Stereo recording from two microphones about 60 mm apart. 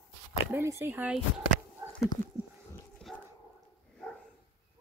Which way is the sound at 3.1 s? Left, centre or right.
Centre.